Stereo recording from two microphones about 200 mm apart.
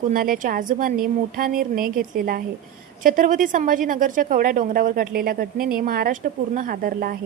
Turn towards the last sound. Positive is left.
turn(degrees=-45)  # may be behind; listen again after turning